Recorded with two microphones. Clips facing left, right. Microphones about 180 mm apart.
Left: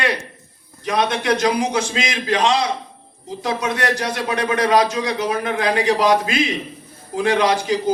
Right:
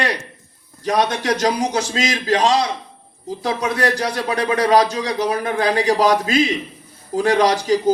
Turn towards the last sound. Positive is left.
turn(degrees=-40)  # may be behind; listen again after turning